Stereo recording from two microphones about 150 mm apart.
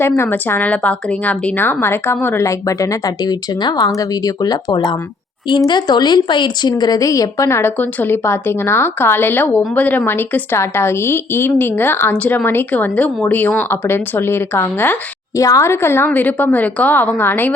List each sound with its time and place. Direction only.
0.2 s a woman's voice: 15° left (ahead or behind)